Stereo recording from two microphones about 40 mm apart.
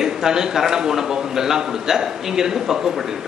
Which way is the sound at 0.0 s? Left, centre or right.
Centre.